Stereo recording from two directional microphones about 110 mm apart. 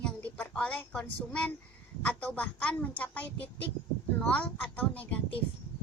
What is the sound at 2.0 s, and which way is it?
A child's voice, 10° left (ahead or behind).